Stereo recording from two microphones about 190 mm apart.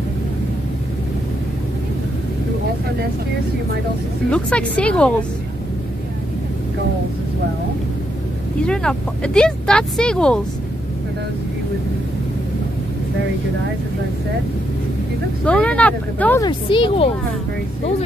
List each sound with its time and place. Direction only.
4.3 s speech: 5° left (ahead or behind)
8.6 s speech: 5° left (ahead or behind)
15.4 s speech: 5° left (ahead or behind)
16.4 s speech: 25° left (ahead or behind)